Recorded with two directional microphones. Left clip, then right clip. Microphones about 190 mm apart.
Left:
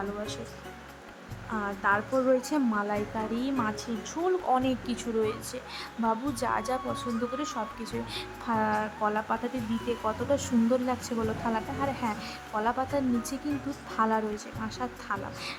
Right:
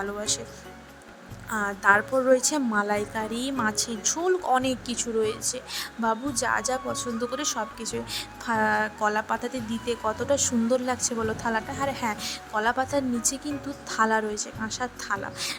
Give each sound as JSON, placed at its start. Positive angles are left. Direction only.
{"t": 1.5, "sound": "a woman's voice", "side_deg": -30}